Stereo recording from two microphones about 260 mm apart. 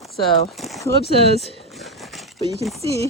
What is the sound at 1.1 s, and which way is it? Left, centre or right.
Speech, right.